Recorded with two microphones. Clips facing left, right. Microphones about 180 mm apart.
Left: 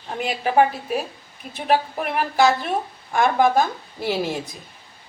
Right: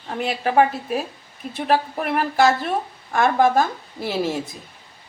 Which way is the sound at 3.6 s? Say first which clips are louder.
Even; centre (ahead or behind).